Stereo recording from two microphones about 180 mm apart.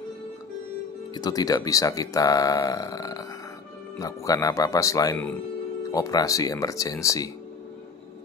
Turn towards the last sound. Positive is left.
turn(degrees=20)  # may be behind; listen again after turning